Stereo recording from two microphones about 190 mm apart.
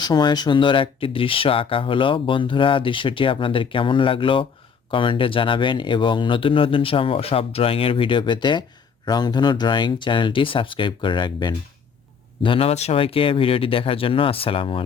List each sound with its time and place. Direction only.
0.0 s speech: 20° left (ahead or behind)